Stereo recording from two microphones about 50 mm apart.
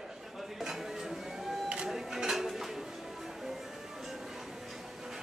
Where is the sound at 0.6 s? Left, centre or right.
Centre.